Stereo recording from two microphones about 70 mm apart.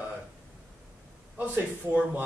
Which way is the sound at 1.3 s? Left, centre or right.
Right.